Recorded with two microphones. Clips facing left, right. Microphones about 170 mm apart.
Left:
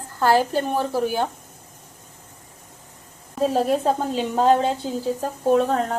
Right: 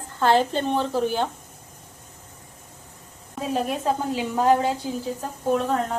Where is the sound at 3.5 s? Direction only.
30° left (ahead or behind).